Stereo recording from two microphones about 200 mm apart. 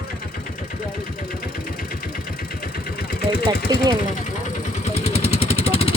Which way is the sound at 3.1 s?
50° left (ahead or behind).